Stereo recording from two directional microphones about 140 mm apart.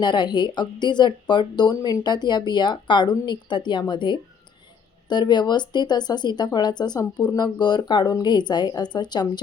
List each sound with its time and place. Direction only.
0.0 s speech: 30° left (ahead or behind)